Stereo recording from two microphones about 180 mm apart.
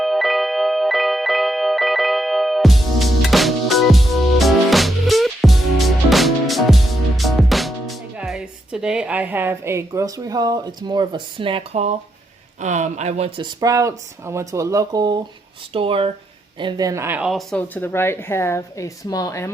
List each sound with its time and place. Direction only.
0.0 s music: centre (ahead or behind)
7.2 s speech: centre (ahead or behind); by 19.5 s 20° left (ahead or behind)